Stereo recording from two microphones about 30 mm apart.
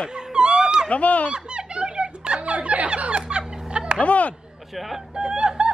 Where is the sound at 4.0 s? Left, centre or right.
Left.